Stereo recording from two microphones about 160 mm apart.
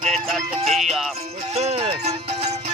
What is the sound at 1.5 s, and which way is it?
Speech, 40° right (ahead or behind).